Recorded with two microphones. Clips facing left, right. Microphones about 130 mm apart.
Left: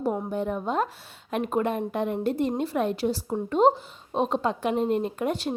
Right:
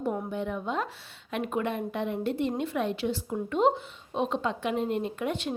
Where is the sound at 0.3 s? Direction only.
40° left (ahead or behind).